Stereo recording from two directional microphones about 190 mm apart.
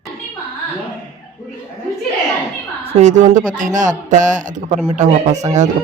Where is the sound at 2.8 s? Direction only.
35° right (ahead or behind).